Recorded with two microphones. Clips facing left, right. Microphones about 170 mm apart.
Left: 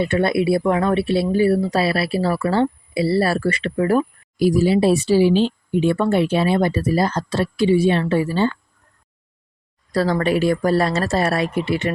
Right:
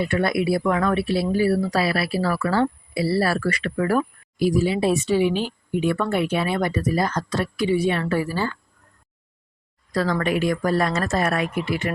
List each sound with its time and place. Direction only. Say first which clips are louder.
0.0 s speech: left 3 dB; 25° left (ahead or behind)
4.4 s speech: left 4 dB; 40° left (ahead or behind)
9.9 s speech: left 4 dB; 35° left (ahead or behind)